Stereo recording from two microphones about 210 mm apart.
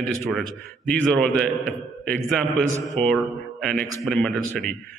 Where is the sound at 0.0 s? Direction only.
5° left (ahead or behind).